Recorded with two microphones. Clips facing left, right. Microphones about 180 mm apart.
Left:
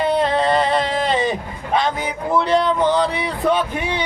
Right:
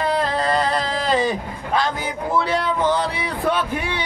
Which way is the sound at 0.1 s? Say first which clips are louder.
Left 3 dB; centre (ahead or behind).